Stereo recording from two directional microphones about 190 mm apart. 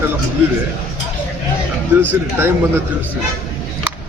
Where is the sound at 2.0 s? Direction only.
10° right (ahead or behind).